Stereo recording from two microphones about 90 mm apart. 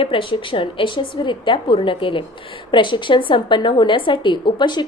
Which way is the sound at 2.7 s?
60° left (ahead or behind).